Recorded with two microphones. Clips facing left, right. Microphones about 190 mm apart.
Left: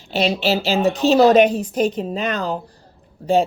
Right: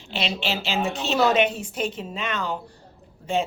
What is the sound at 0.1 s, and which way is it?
A woman's voice, 40° left (ahead or behind).